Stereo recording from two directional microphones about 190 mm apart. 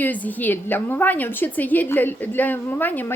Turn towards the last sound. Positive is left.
turn(degrees=10)  # may be behind; listen again after turning